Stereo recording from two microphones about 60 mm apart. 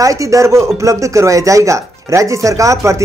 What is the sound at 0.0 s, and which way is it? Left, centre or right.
Speech, right.